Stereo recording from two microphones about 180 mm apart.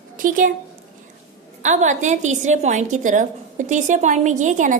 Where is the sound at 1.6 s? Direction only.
40° right (ahead or behind).